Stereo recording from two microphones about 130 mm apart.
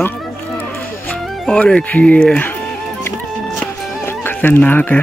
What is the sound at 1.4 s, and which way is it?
Speech, 5° left (ahead or behind).